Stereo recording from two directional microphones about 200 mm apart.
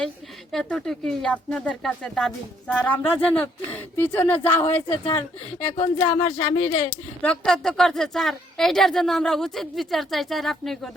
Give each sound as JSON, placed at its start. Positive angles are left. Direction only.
{"t": 0.5, "sound": "a woman's voice", "side_deg": 0}
{"t": 4.6, "sound": "speech", "side_deg": 30}
{"t": 7.2, "sound": "a woman's voice", "side_deg": 5}